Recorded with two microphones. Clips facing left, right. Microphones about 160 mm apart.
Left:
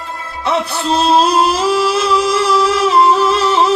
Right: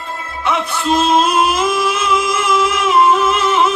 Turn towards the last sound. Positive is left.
turn(degrees=35)  # may be behind; listen again after turning